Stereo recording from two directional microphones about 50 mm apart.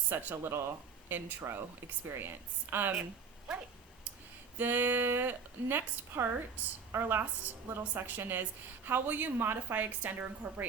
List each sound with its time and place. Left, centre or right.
0.1 s a woman's voice: right
4.5 s a woman's voice: right
6.6 s a woman's voice: right
6.9 s a woman's voice: right